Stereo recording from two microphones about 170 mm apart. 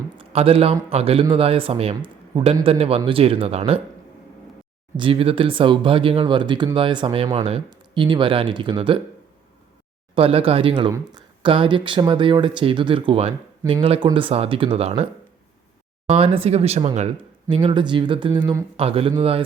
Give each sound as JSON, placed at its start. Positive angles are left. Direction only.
{"t": 0.2, "sound": "a man's voice", "side_deg": -35}
{"t": 4.9, "sound": "a man's voice", "side_deg": -30}
{"t": 10.2, "sound": "a man's voice", "side_deg": -35}
{"t": 16.0, "sound": "a man's voice", "side_deg": -35}
{"t": 17.5, "sound": "a man's voice", "side_deg": -30}